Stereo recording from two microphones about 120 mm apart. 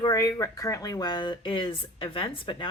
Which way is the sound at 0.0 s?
30° left (ahead or behind).